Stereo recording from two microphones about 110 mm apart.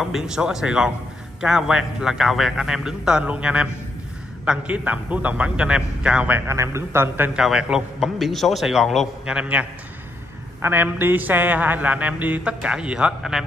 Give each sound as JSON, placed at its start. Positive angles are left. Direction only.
{"t": 0.0, "sound": "a man's voice", "side_deg": -5}
{"t": 6.5, "sound": "a man's voice", "side_deg": -25}
{"t": 7.3, "sound": "a man's voice", "side_deg": -5}